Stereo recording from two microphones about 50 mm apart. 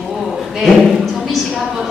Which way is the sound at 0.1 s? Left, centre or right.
Centre.